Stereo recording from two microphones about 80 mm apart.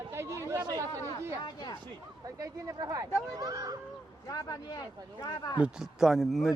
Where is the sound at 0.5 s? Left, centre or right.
Right.